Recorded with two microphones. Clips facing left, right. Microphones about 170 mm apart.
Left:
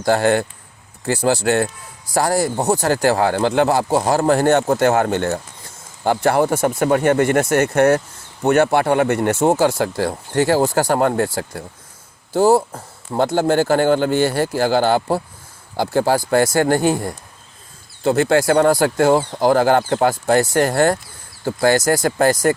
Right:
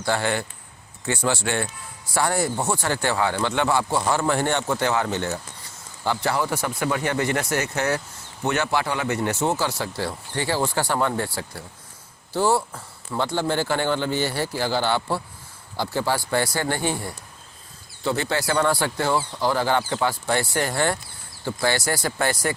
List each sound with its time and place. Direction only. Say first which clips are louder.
0.0 s speech: left 8 dB; 45° left (ahead or behind)
1.0 s a man's voice: left 7 dB; 35° left (ahead or behind)